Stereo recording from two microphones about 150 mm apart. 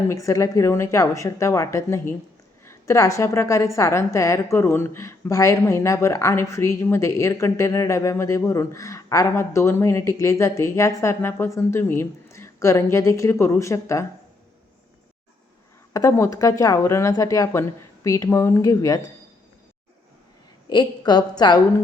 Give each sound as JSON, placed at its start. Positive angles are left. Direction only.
{"t": 0.1, "sound": "a woman's voice", "side_deg": 20}
{"t": 15.9, "sound": "a woman's voice", "side_deg": 20}
{"t": 20.7, "sound": "a woman's voice", "side_deg": 30}